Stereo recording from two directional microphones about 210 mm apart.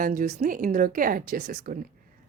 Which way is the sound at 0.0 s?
40° right (ahead or behind).